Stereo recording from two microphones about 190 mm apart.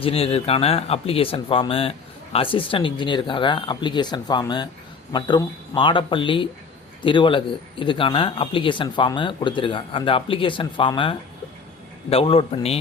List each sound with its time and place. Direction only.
0.0 s speech: 30° left (ahead or behind)